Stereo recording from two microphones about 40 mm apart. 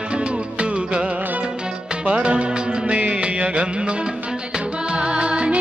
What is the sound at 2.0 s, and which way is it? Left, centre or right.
Music, right.